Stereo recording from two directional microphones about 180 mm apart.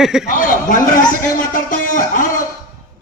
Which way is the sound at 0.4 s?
50° left (ahead or behind).